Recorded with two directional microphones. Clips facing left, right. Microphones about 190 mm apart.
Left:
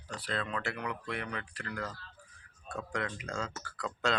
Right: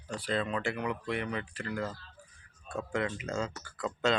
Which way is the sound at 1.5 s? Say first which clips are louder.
Right 4 dB; 25° right (ahead or behind).